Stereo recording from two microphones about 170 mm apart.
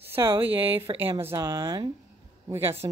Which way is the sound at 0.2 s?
25° right (ahead or behind).